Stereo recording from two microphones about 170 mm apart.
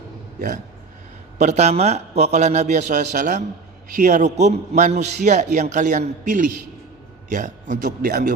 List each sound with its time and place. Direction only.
0.3 s speech: 55° right (ahead or behind)
1.4 s a man's voice: 40° right (ahead or behind)